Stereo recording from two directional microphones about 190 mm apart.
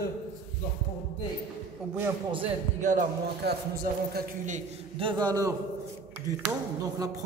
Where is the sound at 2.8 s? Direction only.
40° right (ahead or behind).